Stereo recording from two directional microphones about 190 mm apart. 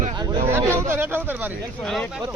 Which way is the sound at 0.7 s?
15° right (ahead or behind).